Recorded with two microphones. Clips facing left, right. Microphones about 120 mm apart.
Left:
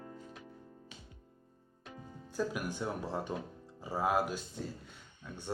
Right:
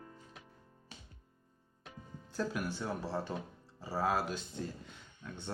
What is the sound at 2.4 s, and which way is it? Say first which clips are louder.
Speech: left 1 dB; 15° left (ahead or behind).